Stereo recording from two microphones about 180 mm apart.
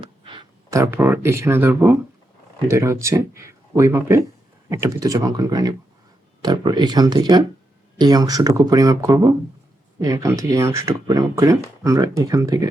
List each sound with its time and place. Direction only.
0.0 s speech: 25° right (ahead or behind)